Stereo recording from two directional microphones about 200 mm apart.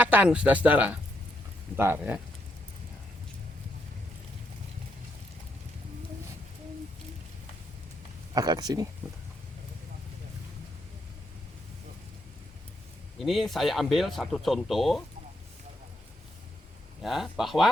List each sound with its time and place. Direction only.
0.0 s speech: 5° right (ahead or behind)
8.3 s speech: 20° right (ahead or behind)
13.1 s speech: centre (ahead or behind)
17.0 s speech: centre (ahead or behind)